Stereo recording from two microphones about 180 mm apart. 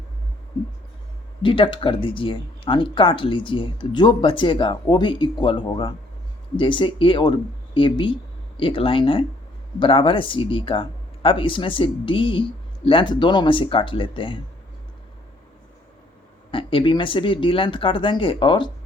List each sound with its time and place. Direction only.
1.4 s speech: 30° left (ahead or behind)
16.5 s speech: 30° left (ahead or behind)